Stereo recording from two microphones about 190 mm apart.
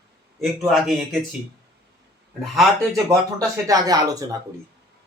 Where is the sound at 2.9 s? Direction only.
15° right (ahead or behind).